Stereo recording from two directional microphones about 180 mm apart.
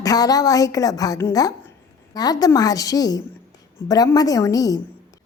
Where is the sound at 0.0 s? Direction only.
20° left (ahead or behind).